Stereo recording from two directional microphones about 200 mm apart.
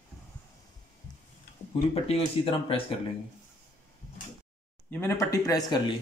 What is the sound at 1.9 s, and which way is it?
Speech, 30° left (ahead or behind).